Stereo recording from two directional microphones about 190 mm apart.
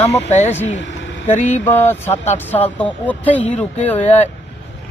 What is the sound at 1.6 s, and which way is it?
Speech, 10° left (ahead or behind).